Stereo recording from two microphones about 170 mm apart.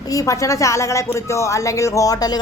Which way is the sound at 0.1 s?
20° left (ahead or behind).